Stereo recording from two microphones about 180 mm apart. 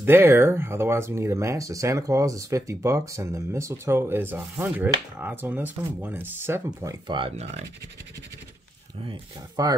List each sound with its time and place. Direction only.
0.0 s speech: 10° right (ahead or behind); by 7.6 s 35° right (ahead or behind)
9.6 s speech: 20° right (ahead or behind)